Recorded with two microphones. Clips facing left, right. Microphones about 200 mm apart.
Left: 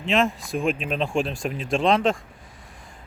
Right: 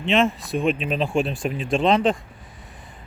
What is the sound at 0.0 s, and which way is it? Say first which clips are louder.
Speech: right 2 dB; centre (ahead or behind).